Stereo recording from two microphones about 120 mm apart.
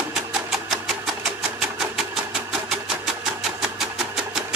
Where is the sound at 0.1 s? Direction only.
5° right (ahead or behind).